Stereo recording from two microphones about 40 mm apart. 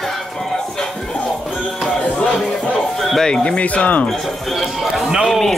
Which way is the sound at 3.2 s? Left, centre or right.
Left.